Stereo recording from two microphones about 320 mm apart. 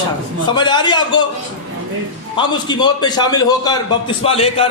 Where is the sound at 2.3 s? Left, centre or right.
Centre.